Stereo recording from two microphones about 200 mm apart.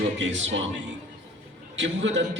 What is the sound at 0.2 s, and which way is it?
Speech, 70° right (ahead or behind).